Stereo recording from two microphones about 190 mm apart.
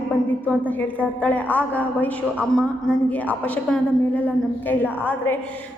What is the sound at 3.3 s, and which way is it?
A woman's voice, 10° left (ahead or behind).